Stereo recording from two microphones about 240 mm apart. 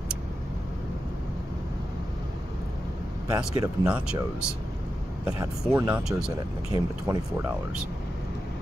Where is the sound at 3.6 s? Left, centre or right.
Centre.